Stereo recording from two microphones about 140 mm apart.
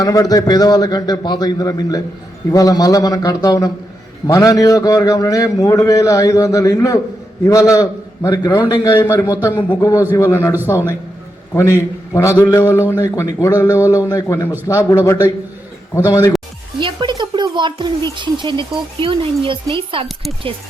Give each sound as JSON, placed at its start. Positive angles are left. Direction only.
{"t": 0.0, "sound": "a man's voice", "side_deg": 25}
{"t": 16.8, "sound": "speech", "side_deg": -30}